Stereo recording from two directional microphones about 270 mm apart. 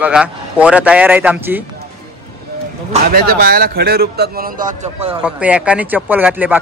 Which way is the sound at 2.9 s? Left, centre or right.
Right.